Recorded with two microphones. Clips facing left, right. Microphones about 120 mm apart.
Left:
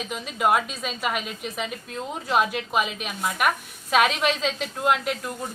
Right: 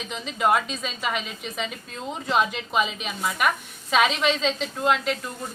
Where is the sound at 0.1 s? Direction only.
5° left (ahead or behind).